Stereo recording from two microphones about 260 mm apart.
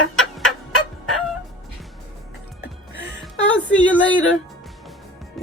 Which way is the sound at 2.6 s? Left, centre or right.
Left.